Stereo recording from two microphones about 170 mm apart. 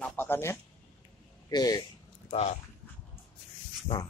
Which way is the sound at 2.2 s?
40° left (ahead or behind).